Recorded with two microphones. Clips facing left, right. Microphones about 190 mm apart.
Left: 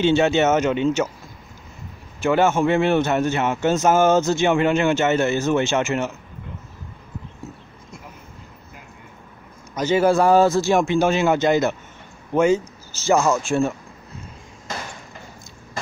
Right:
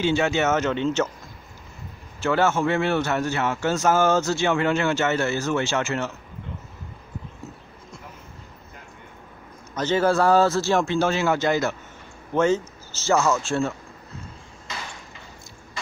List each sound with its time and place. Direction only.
0.0 s a man's voice: 25° left (ahead or behind)
2.1 s a man's voice: 15° left (ahead or behind)
9.8 s a man's voice: 10° left (ahead or behind)